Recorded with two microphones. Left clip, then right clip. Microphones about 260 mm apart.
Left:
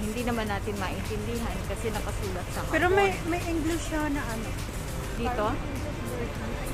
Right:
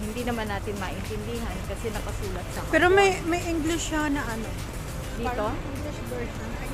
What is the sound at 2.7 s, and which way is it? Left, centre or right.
Speech, right.